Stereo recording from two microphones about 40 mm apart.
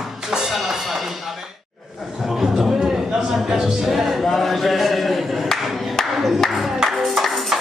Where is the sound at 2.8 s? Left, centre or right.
Centre.